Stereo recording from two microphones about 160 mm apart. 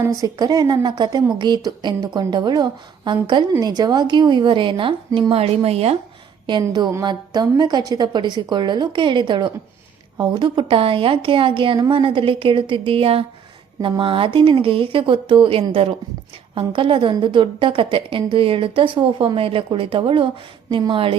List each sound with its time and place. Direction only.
0.0 s a woman's voice: 25° right (ahead or behind); by 6.0 s 40° right (ahead or behind)
6.5 s a woman's voice: 25° right (ahead or behind)